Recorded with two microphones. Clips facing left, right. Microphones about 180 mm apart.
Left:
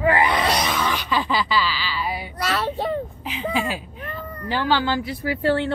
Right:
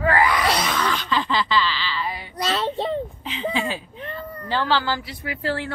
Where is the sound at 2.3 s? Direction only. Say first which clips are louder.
Right 2 dB; 20° right (ahead or behind).